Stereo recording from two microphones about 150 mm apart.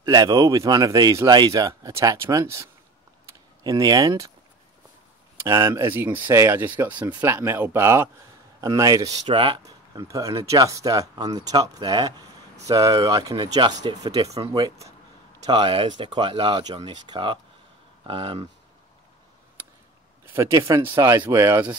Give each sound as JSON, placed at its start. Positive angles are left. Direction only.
{"t": 0.0, "sound": "speech", "side_deg": -25}
{"t": 5.4, "sound": "speech", "side_deg": -20}
{"t": 9.3, "sound": "speech", "side_deg": -35}
{"t": 9.7, "sound": "speech", "side_deg": -20}
{"t": 20.3, "sound": "speech", "side_deg": -20}